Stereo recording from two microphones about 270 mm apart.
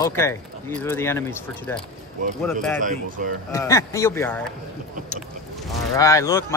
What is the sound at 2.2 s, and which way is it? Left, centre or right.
Speech, right.